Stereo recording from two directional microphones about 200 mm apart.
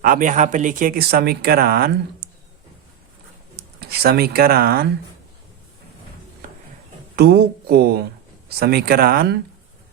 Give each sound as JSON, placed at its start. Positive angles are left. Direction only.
{"t": 0.0, "sound": "speech", "side_deg": -45}
{"t": 3.5, "sound": "speech", "side_deg": -50}
{"t": 7.2, "sound": "speech", "side_deg": -55}